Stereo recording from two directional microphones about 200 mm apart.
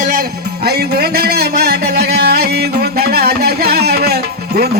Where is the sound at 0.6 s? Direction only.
50° right (ahead or behind).